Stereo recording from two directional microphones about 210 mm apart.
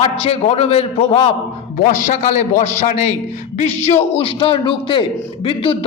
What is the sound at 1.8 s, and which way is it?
A man's voice, 35° left (ahead or behind).